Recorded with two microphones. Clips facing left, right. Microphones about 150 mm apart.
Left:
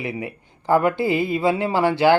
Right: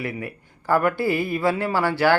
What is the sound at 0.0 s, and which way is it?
A man's voice, 20° left (ahead or behind).